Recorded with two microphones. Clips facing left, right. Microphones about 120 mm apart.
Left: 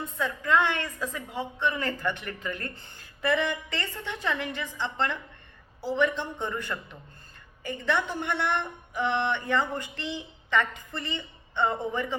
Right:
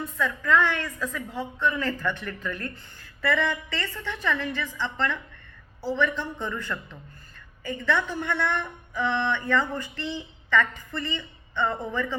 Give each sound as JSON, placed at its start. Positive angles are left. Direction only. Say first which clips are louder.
{"t": 0.0, "sound": "a woman's voice", "louder": "right 2 dB", "side_deg": 20}